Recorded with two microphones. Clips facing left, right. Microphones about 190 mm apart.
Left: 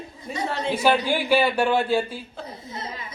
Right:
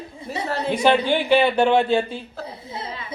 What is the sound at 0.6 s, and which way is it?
A man's voice, 5° left (ahead or behind).